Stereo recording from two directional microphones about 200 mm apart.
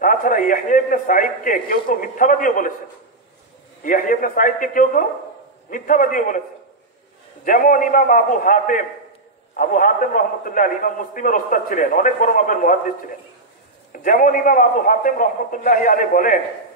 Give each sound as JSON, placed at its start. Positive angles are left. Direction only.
{"t": 0.0, "sound": "a man's voice", "side_deg": 45}
{"t": 3.8, "sound": "a man's voice", "side_deg": 40}
{"t": 7.4, "sound": "a man's voice", "side_deg": 40}
{"t": 14.0, "sound": "a man's voice", "side_deg": 45}